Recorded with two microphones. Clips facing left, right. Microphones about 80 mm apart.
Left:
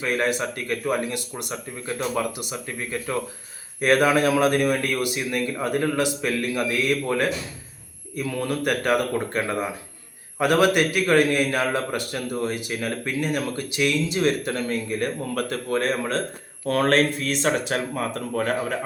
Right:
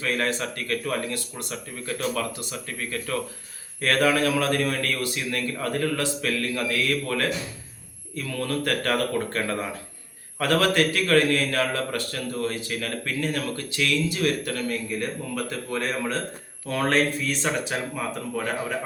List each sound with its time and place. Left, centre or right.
0.0 s a man's voice: centre
15.0 s speech: left
15.7 s a man's voice: left
16.6 s speech: left
16.9 s speech: left
17.7 s speech: left